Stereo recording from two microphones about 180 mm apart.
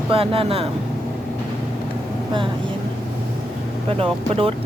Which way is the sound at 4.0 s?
30° right (ahead or behind).